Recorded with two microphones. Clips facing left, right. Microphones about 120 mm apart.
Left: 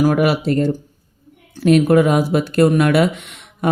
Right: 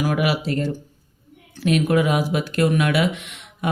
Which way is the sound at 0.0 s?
45° left (ahead or behind).